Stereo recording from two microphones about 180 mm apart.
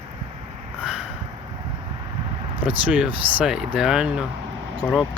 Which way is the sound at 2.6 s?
10° right (ahead or behind).